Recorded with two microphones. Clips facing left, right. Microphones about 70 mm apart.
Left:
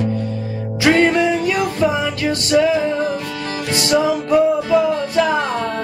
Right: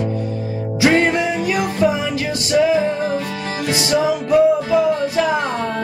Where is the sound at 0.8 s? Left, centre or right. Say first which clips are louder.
Left 1 dB; centre.